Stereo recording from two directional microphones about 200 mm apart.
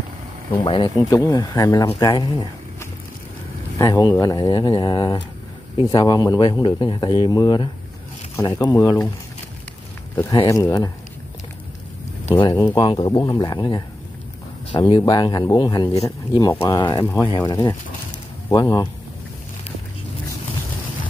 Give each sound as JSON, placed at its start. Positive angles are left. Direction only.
{"t": 0.7, "sound": "speech", "side_deg": 20}
{"t": 10.3, "sound": "speech", "side_deg": 20}
{"t": 12.3, "sound": "speech", "side_deg": 20}